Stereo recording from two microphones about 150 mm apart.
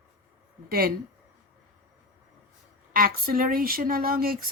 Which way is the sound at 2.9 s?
75° right (ahead or behind).